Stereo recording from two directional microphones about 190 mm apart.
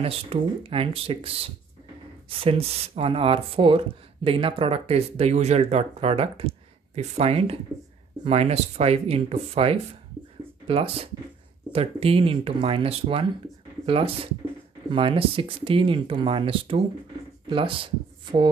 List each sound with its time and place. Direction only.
0.0 s speech: 30° right (ahead or behind)